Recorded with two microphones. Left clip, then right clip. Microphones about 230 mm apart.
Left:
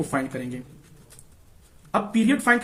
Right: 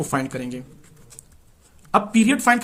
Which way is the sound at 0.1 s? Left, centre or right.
Right.